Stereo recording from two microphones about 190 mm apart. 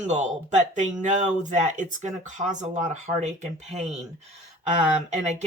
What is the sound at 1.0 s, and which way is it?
Speech, 40° right (ahead or behind).